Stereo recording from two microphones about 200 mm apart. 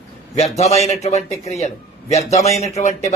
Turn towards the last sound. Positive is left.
turn(degrees=35)  # may be behind; listen again after turning